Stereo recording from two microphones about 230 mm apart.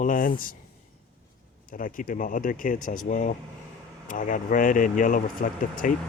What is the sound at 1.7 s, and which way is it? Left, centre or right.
Speech, left.